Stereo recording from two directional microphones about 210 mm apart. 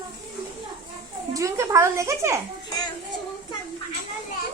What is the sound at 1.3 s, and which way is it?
A woman's voice, 15° right (ahead or behind).